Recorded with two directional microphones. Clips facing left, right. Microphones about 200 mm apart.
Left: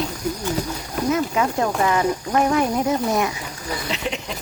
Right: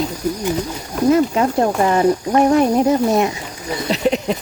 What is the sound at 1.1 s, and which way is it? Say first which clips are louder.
Speech: right 6 dB; 35° right (ahead or behind).